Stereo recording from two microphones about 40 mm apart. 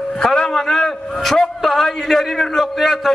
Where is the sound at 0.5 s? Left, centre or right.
Centre.